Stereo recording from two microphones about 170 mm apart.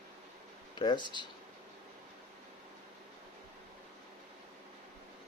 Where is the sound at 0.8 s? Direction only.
25° left (ahead or behind).